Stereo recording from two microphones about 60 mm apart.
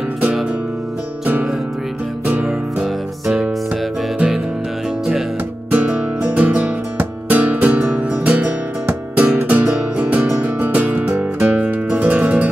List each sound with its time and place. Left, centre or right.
2.4 s music: centre
5.7 s music: right